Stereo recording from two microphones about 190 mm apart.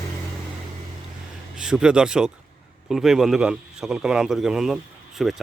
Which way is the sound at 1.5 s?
5° right (ahead or behind).